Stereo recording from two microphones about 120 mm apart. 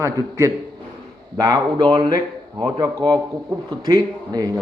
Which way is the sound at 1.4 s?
35° right (ahead or behind).